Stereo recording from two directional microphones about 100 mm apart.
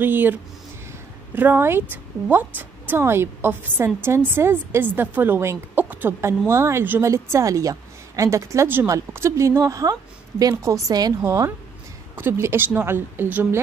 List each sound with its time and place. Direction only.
0.0 s a woman's voice: 20° right (ahead or behind)